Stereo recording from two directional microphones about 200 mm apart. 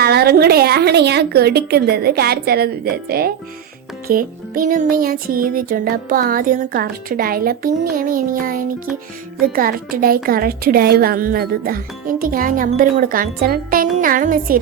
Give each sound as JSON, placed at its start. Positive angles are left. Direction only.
{"t": 0.0, "sound": "music", "side_deg": -50}